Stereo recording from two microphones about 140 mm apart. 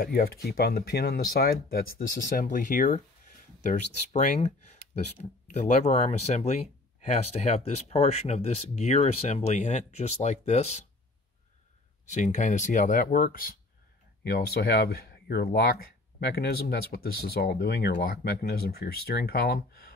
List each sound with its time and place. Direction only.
0.0 s speech: 90° left; by 3.0 s 70° left (ahead or behind)
3.6 s speech: 60° left (ahead or behind)
12.1 s speech: 60° left (ahead or behind); by 19.9 s 90° left